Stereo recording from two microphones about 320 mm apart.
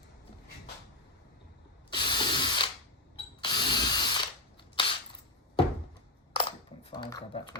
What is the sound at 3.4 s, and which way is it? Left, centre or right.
Drill, centre.